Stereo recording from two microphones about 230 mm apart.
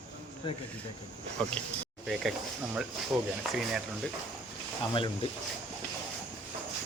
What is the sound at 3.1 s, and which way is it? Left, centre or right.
Speech, centre.